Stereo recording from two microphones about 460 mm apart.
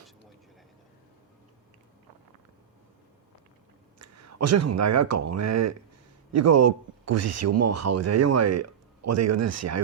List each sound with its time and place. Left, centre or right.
3.9 s a man's voice: right